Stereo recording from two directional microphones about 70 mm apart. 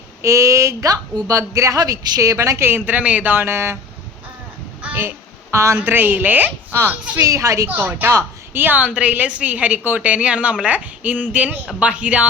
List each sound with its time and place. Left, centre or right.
0.2 s a woman's voice: right
2.6 s a woman's voice: right
3.3 s speech: right
4.9 s a sound: right
5.7 s a woman's voice: right
7.2 s a woman's voice: right
7.7 s a woman's voice: right